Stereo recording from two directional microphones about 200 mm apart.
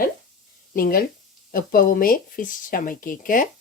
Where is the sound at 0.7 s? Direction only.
45° left (ahead or behind).